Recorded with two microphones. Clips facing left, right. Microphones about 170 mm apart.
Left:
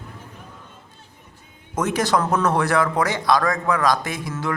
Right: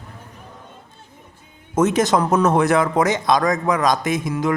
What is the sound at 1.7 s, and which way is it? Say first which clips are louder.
Speech: right 4 dB; 20° right (ahead or behind).